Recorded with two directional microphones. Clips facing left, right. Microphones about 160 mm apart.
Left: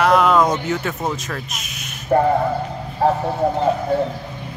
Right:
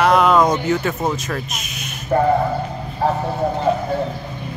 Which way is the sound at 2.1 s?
45° left (ahead or behind).